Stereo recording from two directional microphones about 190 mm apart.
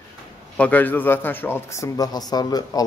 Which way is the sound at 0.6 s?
10° left (ahead or behind).